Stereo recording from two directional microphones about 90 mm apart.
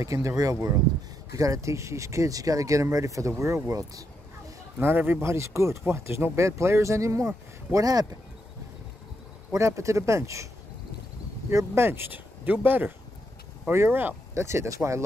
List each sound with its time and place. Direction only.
0.0 s speech: 35° right (ahead or behind)
4.7 s speech: 25° right (ahead or behind); by 8.2 s 45° right (ahead or behind)
9.5 s speech: 35° right (ahead or behind)
11.5 s speech: 25° right (ahead or behind)